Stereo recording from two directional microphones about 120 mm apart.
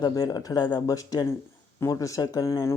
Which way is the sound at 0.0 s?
35° left (ahead or behind).